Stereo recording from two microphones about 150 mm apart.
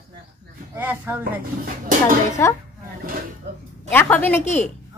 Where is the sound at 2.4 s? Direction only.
15° left (ahead or behind).